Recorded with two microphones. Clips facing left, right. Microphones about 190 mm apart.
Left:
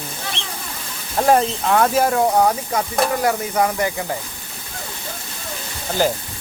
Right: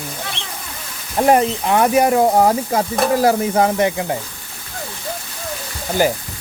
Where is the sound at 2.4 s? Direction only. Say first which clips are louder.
Right 3 dB; 30° right (ahead or behind).